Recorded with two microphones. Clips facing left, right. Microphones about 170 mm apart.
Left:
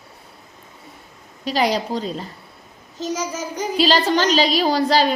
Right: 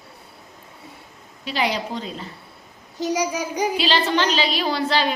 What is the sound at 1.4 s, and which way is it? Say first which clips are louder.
Speech: left 4 dB; 40° left (ahead or behind).